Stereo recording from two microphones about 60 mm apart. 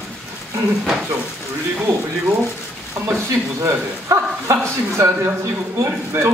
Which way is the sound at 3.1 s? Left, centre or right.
Right.